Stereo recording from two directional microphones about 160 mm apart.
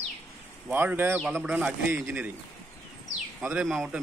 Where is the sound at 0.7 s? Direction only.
10° right (ahead or behind).